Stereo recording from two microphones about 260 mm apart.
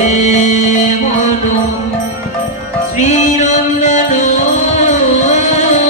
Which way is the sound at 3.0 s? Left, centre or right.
Left.